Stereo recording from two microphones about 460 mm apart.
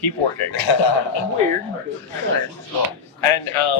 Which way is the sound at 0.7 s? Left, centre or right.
Left.